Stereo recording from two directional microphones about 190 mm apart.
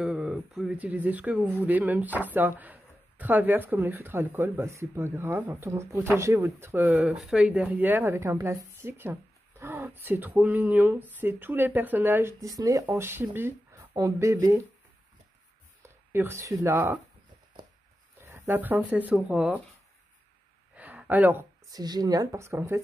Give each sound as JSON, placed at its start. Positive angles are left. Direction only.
{"t": 0.0, "sound": "speech", "side_deg": -5}
{"t": 16.1, "sound": "speech", "side_deg": -15}
{"t": 18.2, "sound": "speech", "side_deg": -15}
{"t": 20.7, "sound": "a sound", "side_deg": -10}
{"t": 21.6, "sound": "speech", "side_deg": -20}